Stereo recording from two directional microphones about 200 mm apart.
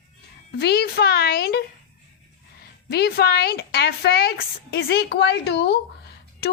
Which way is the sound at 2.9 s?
50° left (ahead or behind).